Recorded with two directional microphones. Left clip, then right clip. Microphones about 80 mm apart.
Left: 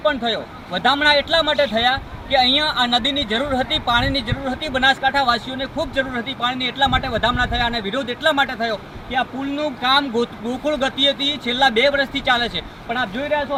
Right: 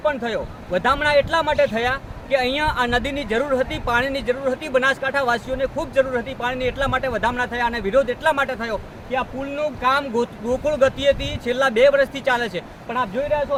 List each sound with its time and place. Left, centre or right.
0.2 s a man's voice: right
11.7 s speech: right